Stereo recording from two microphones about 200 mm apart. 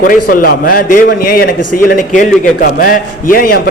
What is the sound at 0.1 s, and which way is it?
A man's voice, 45° left (ahead or behind).